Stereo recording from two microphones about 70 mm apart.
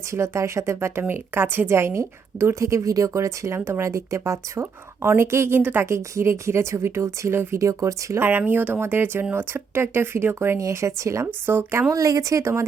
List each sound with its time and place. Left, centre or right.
0.1 s speech: right
5.8 s a woman's voice: right
8.2 s speech: right
10.6 s a woman's voice: right
11.4 s a woman's voice: right